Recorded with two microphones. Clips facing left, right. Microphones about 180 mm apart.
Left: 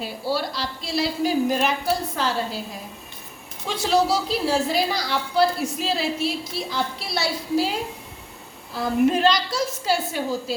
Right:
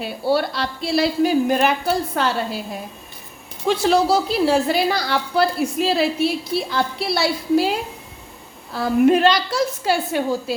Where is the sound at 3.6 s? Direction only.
60° right (ahead or behind).